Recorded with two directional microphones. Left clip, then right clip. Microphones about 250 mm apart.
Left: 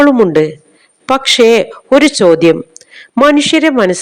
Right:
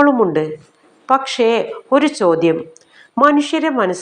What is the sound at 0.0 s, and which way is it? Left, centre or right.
A man's voice, left.